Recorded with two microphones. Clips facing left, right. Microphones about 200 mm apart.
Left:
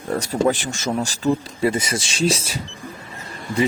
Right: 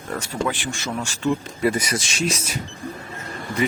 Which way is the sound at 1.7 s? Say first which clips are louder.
Left 1 dB; 25° left (ahead or behind).